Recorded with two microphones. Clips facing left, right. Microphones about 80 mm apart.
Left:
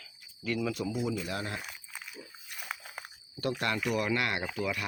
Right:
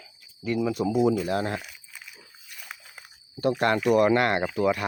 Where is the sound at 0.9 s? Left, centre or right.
Right.